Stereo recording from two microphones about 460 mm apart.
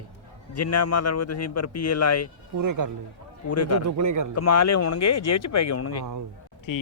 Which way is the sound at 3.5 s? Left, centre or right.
Left.